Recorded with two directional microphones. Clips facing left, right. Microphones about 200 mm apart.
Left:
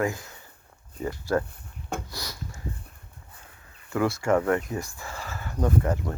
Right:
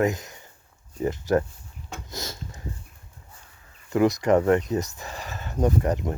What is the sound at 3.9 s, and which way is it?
Speech, 20° right (ahead or behind).